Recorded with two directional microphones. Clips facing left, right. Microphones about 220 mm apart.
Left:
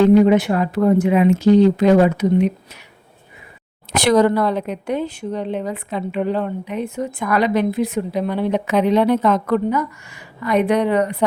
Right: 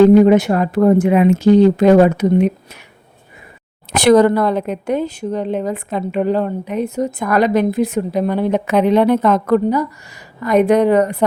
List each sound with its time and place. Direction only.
0.0 s a woman's voice: 45° right (ahead or behind)
3.9 s a woman's voice: 50° right (ahead or behind)
9.6 s a woman's voice: 40° right (ahead or behind)